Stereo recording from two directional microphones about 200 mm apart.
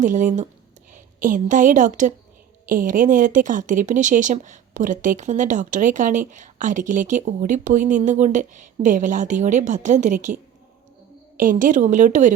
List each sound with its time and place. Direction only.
0.0 s a woman's voice: 40° right (ahead or behind)
11.3 s speech: 40° right (ahead or behind)